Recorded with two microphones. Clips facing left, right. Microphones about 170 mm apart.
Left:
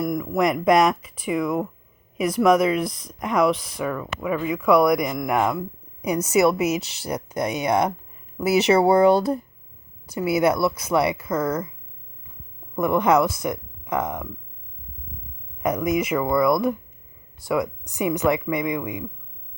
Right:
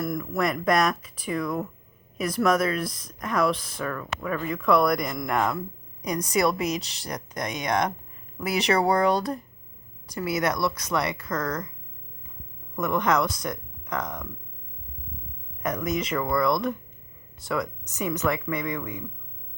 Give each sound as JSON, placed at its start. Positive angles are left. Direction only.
{"t": 0.0, "sound": "speech", "side_deg": 15}
{"t": 8.8, "sound": "speech", "side_deg": 25}
{"t": 10.1, "sound": "speech", "side_deg": 25}
{"t": 10.4, "sound": "speech", "side_deg": 10}
{"t": 12.7, "sound": "speech", "side_deg": 25}
{"t": 13.9, "sound": "speech", "side_deg": 10}
{"t": 15.6, "sound": "speech", "side_deg": 10}
{"t": 17.5, "sound": "speech", "side_deg": 20}